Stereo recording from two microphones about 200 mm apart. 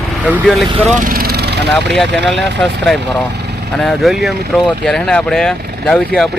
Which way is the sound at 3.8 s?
Centre (ahead or behind).